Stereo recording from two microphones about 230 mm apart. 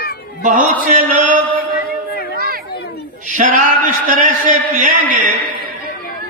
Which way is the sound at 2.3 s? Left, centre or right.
Right.